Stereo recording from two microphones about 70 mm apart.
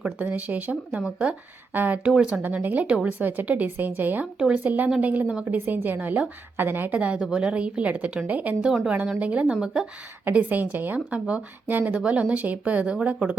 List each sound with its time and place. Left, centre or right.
0.3 s a woman's voice: right
2.1 s speech: centre
2.4 s a woman's voice: right
4.4 s speech: centre
4.6 s a woman's voice: right
5.5 s a woman's voice: right; by 9.8 s centre
10.3 s a woman's voice: right